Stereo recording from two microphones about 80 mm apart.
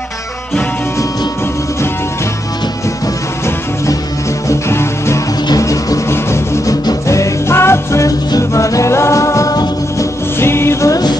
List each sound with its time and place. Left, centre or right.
4.5 s music: left
5.5 s music: left
9.9 s music: left